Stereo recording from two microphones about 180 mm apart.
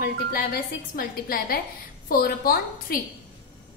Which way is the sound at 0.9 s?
55° left (ahead or behind).